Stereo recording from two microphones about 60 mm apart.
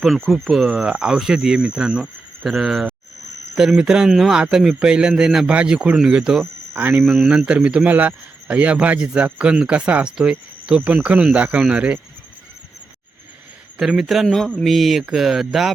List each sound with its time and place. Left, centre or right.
0.3 s speech: centre
2.4 s speech: centre
5.5 s speech: centre
6.7 s speech: right
7.3 s speech: centre
10.8 s speech: right
13.7 s speech: centre
14.6 s speech: centre
15.0 s speech: centre